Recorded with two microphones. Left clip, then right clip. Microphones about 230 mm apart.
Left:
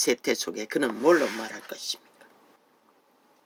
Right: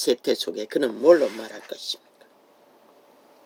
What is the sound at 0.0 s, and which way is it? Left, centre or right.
Speech, left.